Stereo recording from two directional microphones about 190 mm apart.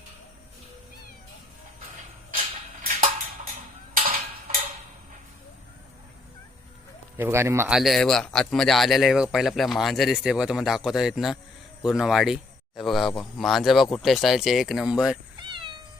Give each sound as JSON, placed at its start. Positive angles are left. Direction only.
{"t": 3.9, "sound": "a sound", "side_deg": -45}
{"t": 7.2, "sound": "speech", "side_deg": -15}
{"t": 7.8, "sound": "speech", "side_deg": 0}
{"t": 15.4, "sound": "cat", "side_deg": -25}